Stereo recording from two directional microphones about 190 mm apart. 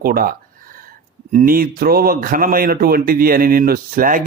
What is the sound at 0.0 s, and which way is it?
Speech, 50° right (ahead or behind).